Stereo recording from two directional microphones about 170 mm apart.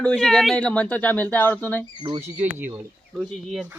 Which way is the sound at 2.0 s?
25° right (ahead or behind).